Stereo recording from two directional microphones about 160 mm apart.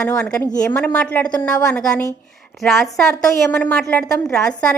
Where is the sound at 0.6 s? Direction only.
5° left (ahead or behind).